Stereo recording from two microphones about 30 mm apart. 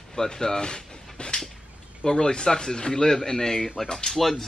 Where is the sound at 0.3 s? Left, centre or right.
Left.